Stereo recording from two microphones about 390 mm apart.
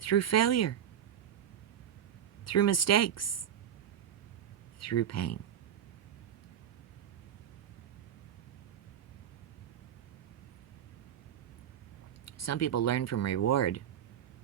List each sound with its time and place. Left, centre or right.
0.0 s speech: left
2.4 s speech: left
4.8 s speech: left
12.2 s speech: left